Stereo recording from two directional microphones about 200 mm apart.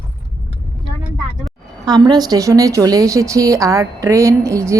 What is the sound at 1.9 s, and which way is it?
A woman's voice, 20° right (ahead or behind).